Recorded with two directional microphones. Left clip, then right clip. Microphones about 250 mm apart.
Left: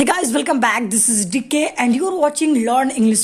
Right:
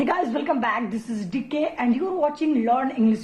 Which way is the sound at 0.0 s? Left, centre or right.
Left.